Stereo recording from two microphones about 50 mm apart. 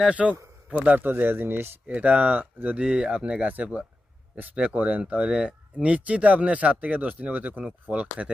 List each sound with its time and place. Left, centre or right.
0.1 s speech: right
1.9 s speech: right
2.7 s speech: right